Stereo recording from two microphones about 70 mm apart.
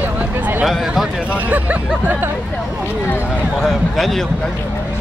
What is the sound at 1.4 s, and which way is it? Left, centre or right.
Music, right.